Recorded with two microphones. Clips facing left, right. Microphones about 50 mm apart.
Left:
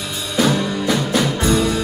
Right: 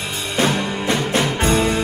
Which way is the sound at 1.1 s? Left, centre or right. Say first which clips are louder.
Even; right.